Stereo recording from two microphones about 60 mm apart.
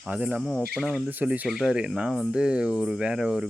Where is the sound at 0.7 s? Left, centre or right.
Centre.